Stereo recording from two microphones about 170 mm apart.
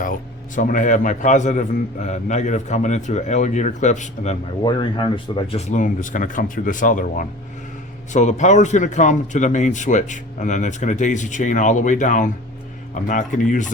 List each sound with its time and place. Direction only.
0.0 s a man's voice: 50° left (ahead or behind)
4.6 s a man's voice: 30° left (ahead or behind); by 13.7 s 50° left (ahead or behind)